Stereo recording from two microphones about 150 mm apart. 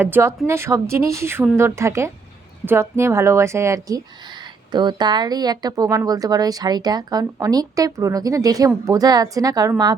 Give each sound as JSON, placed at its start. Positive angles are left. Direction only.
{"t": 0.0, "sound": "speech", "side_deg": -15}